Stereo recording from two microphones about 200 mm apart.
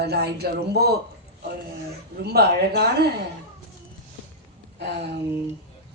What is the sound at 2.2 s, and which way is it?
Speech, 50° right (ahead or behind).